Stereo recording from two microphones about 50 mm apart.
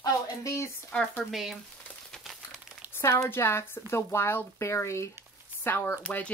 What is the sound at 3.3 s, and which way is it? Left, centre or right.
Speech, left.